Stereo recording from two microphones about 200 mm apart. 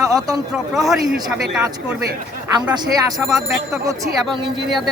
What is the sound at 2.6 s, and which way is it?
Speech, 20° right (ahead or behind).